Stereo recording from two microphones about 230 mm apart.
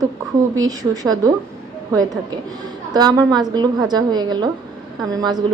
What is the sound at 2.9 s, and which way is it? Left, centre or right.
A woman's voice, centre.